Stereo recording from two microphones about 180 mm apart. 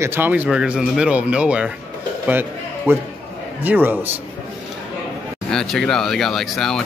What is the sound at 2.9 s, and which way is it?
Speech, 15° right (ahead or behind).